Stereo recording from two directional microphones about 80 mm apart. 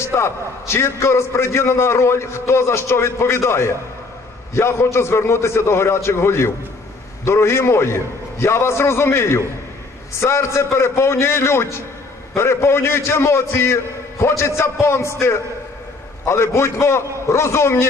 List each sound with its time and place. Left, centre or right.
0.0 s a man's voice: left